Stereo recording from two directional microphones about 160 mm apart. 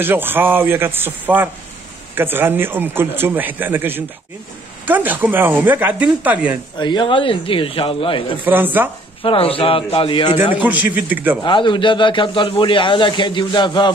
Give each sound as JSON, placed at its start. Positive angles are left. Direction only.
{"t": 0.0, "sound": "a man's voice", "side_deg": -15}
{"t": 6.8, "sound": "a man's voice", "side_deg": 30}
{"t": 8.5, "sound": "a man's voice", "side_deg": -10}
{"t": 9.2, "sound": "a man's voice", "side_deg": 35}
{"t": 10.5, "sound": "a man's voice", "side_deg": -10}
{"t": 11.4, "sound": "a man's voice", "side_deg": 30}